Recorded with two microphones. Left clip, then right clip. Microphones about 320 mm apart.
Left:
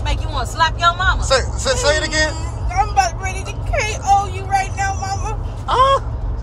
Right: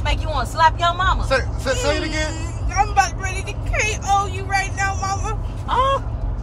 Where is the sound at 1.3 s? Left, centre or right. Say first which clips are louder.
Left 3 dB; left.